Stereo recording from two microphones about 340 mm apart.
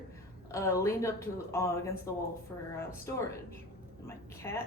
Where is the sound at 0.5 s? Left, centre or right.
Centre.